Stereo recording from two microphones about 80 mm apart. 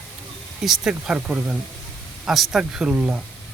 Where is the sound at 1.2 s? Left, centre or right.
Centre.